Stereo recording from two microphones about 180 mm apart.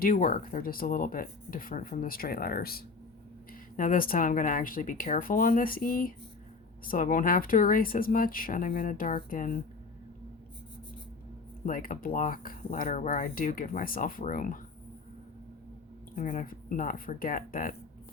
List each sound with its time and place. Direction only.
0.0 s speech: 50° left (ahead or behind)
11.6 s speech: 50° left (ahead or behind)
16.1 s speech: 45° left (ahead or behind)